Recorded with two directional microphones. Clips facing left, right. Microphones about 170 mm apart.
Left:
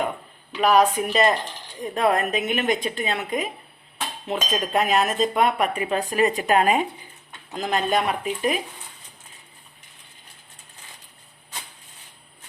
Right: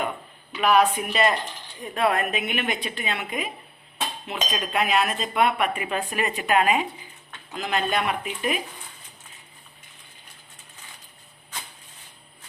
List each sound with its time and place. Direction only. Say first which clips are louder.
0.6 s speech: left 2 dB; 40° left (ahead or behind)